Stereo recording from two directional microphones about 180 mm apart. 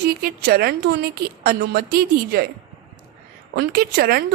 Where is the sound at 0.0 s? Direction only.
55° right (ahead or behind).